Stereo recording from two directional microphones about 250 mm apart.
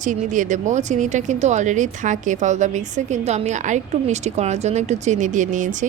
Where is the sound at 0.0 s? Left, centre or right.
Right.